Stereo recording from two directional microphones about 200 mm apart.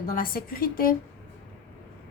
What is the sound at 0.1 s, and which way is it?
Speech, 45° left (ahead or behind).